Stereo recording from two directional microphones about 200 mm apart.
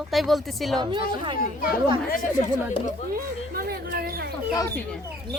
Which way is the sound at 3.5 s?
50° right (ahead or behind).